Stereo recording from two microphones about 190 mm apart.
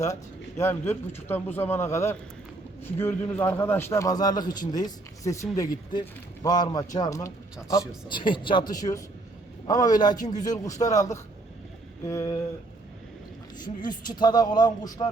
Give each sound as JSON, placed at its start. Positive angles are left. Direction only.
{"t": 0.0, "sound": "speech", "side_deg": 15}
{"t": 13.8, "sound": "speech", "side_deg": 20}